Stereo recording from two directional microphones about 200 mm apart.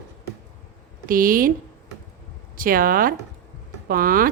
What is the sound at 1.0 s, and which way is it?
Speech, 45° right (ahead or behind).